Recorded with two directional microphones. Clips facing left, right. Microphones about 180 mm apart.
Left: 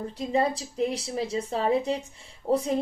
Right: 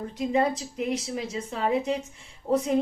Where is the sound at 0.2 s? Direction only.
35° left (ahead or behind).